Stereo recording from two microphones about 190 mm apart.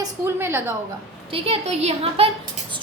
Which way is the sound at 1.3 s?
30° right (ahead or behind).